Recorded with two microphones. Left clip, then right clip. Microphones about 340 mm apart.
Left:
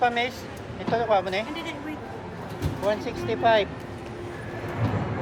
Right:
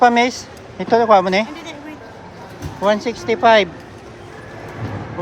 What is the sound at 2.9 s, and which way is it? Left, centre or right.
Speech, right.